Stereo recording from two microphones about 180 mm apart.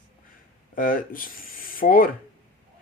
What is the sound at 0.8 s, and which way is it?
Speech, 50° left (ahead or behind).